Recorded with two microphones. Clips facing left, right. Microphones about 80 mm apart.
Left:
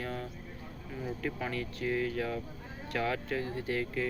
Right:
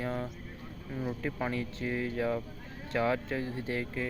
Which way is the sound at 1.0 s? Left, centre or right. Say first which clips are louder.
Right 2 dB; centre.